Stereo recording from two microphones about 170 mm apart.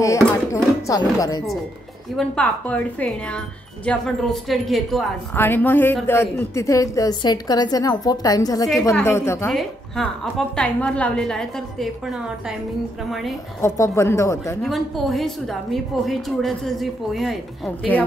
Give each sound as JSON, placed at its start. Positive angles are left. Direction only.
{"t": 0.0, "sound": "music", "side_deg": 20}
{"t": 2.1, "sound": "speech", "side_deg": 5}
{"t": 5.3, "sound": "a woman's voice", "side_deg": 10}
{"t": 9.5, "sound": "a woman's voice", "side_deg": 0}
{"t": 13.6, "sound": "speech", "side_deg": 15}
{"t": 14.6, "sound": "a woman's voice", "side_deg": 0}